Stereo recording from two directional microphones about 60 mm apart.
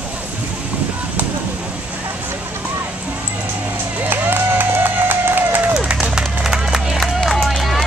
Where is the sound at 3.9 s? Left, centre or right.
Right.